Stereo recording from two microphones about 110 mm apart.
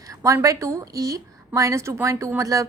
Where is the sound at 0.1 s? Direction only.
30° right (ahead or behind).